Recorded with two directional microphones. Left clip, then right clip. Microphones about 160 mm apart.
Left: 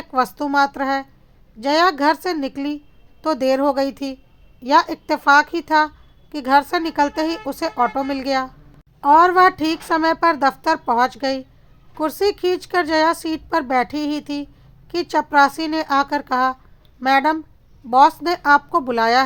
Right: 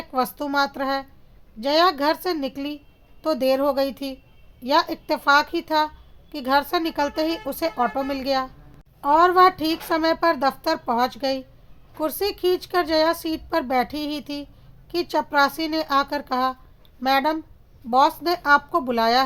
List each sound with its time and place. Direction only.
0.1 s speech: 20° left (ahead or behind)